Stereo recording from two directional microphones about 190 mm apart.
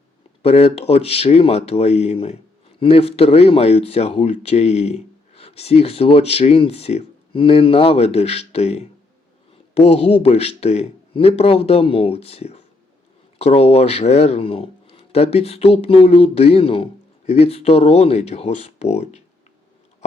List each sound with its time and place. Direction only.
0.4 s speech: 30° left (ahead or behind)